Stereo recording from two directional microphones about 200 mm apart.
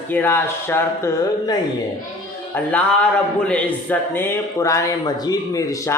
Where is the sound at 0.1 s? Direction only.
10° left (ahead or behind).